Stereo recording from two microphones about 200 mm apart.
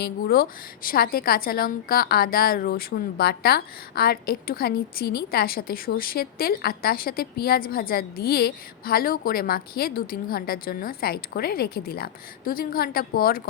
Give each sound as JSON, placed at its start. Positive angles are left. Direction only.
{"t": 0.0, "sound": "a woman's voice", "side_deg": 50}